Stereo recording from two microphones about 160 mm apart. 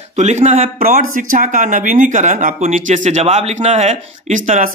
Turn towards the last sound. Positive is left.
turn(degrees=-50)  # may be behind; listen again after turning